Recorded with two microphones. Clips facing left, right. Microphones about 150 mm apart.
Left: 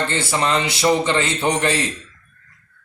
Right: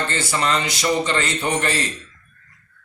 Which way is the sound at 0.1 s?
25° left (ahead or behind).